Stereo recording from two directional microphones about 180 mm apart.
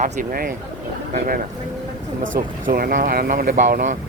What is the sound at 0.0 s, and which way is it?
Speech, 50° right (ahead or behind).